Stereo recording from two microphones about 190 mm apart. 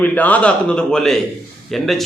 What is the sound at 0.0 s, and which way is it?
A man's voice, 5° left (ahead or behind).